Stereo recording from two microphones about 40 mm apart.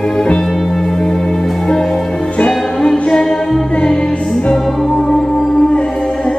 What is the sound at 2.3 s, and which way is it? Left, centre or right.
Music, left.